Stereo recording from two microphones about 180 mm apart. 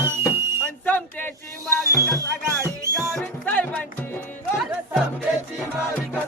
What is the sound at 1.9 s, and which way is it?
Music, 15° left (ahead or behind).